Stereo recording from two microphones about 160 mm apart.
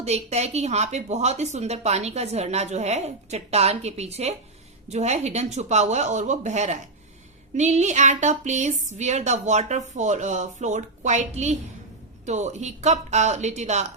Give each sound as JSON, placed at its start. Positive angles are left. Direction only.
{"t": 0.0, "sound": "a woman's voice", "side_deg": -40}